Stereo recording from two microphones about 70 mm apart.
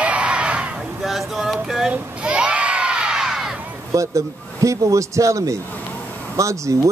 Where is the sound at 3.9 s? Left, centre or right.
Right.